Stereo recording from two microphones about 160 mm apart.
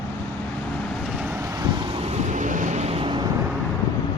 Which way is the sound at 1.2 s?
20° right (ahead or behind).